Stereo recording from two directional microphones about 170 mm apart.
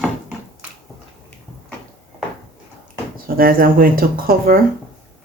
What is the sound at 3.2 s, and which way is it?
Speech, 60° right (ahead or behind).